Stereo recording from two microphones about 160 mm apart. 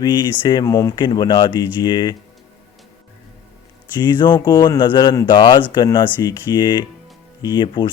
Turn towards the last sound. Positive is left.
turn(degrees=25)  # may be behind; listen again after turning